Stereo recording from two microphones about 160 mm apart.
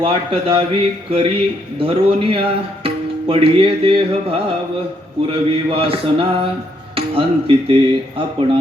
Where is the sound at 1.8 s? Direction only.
35° right (ahead or behind).